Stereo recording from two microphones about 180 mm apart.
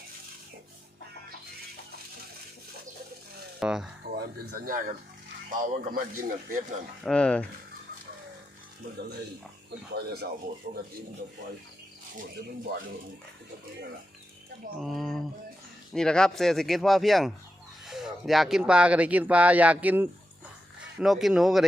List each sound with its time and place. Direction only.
3.6 s speech: 5° right (ahead or behind)
4.1 s speech: 55° right (ahead or behind)
7.0 s speech: 5° left (ahead or behind)
9.9 s speech: 65° right (ahead or behind)
14.8 s speech: centre (ahead or behind)